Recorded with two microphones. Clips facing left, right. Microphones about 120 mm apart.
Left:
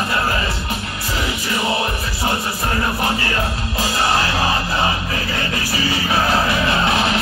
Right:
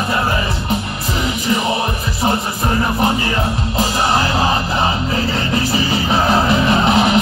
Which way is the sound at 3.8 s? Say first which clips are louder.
Right 2 dB; 20° right (ahead or behind).